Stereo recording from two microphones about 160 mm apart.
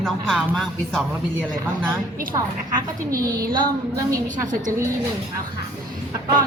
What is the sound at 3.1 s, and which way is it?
Speech, 65° right (ahead or behind).